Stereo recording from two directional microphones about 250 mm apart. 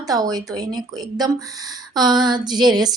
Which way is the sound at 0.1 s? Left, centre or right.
Centre.